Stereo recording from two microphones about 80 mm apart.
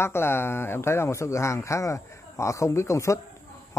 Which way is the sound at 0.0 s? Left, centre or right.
Left.